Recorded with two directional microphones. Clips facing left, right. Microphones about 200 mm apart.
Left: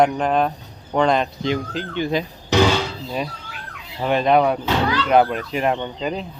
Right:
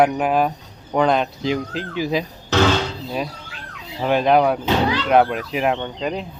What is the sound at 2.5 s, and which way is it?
Music, 15° left (ahead or behind).